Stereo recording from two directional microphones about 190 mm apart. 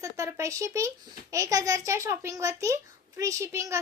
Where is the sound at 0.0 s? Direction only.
15° right (ahead or behind).